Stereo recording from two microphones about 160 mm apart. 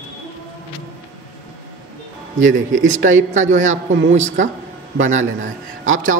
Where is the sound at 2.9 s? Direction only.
50° right (ahead or behind).